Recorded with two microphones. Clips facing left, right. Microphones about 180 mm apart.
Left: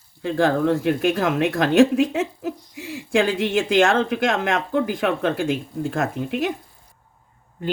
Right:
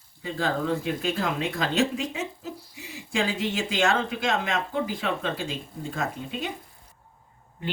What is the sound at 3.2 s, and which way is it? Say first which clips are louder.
Speech: left 7 dB; 55° left (ahead or behind).